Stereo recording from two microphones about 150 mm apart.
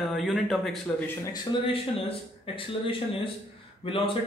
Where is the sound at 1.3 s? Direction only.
30° left (ahead or behind).